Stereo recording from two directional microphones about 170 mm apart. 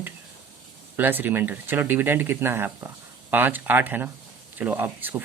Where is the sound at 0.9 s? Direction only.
10° right (ahead or behind).